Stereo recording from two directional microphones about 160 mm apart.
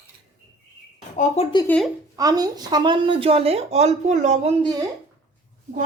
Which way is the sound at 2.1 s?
25° right (ahead or behind).